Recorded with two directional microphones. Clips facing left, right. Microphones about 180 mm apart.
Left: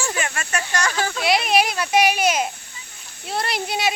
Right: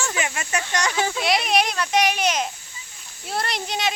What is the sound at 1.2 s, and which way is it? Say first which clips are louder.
Speech: left 4 dB; centre (ahead or behind).